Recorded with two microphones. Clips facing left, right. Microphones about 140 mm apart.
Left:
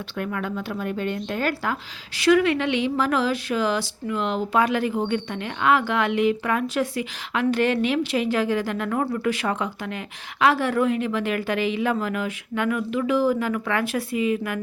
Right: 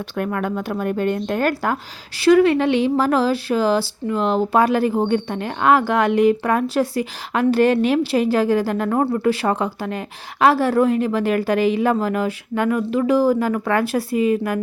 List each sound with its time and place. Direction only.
0.2 s a woman's voice: 50° right (ahead or behind)
2.2 s speech: 35° right (ahead or behind)